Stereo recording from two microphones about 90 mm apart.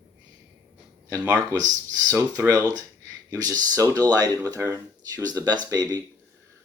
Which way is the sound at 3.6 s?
40° right (ahead or behind).